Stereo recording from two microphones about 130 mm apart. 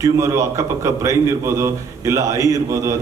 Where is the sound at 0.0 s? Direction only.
25° right (ahead or behind).